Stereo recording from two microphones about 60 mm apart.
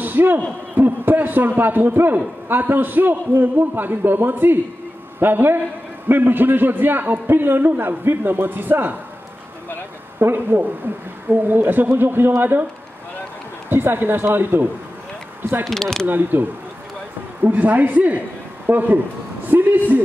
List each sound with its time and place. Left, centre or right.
0.0 s a sound: right
0.7 s a man's voice: right
10.1 s a man's voice: right
13.7 s a man's voice: right
15.6 s speech: centre
16.1 s a man's voice: right